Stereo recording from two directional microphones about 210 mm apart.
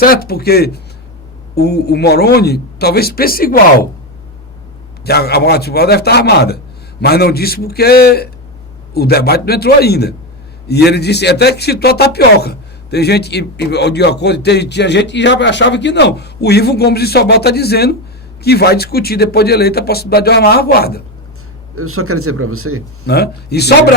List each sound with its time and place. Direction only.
0.0 s speech: 45° left (ahead or behind)
5.0 s speech: 50° left (ahead or behind)
21.8 s speech: 90° right
23.0 s speech: 50° left (ahead or behind)